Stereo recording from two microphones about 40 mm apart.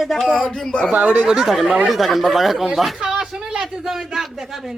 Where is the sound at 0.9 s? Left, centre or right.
Right.